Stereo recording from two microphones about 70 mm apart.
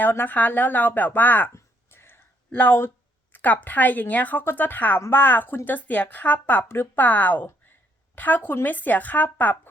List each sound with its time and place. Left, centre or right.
0.0 s a woman's voice: left
1.5 s a sound: left
3.3 s a woman's voice: left